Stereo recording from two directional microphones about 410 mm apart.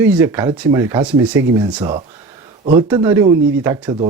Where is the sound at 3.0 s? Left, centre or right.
Centre.